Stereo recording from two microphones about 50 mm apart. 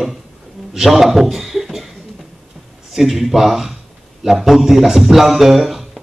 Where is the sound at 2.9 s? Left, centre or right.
Centre.